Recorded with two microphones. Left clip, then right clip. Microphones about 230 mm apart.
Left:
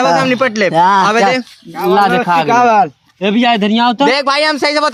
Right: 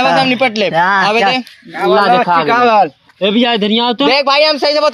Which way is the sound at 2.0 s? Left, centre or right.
Left.